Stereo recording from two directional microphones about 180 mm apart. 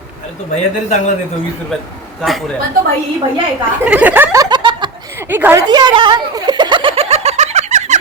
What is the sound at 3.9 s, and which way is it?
Snicker, 10° right (ahead or behind).